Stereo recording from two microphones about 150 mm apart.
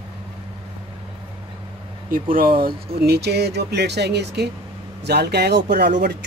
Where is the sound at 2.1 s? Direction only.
70° right (ahead or behind).